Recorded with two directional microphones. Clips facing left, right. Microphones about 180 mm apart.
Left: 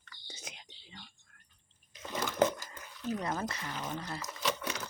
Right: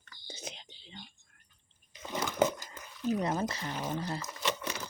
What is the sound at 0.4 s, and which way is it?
Whispering, 25° right (ahead or behind).